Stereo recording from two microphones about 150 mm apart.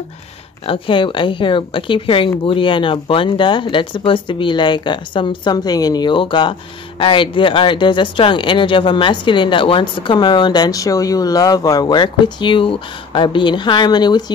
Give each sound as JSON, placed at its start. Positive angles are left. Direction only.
{"t": 0.7, "sound": "speech", "side_deg": 35}